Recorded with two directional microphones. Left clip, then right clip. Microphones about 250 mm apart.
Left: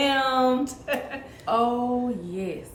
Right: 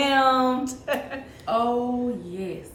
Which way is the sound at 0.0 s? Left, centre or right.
Centre.